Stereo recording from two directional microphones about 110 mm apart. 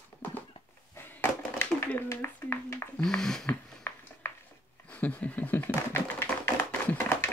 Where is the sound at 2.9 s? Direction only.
5° left (ahead or behind).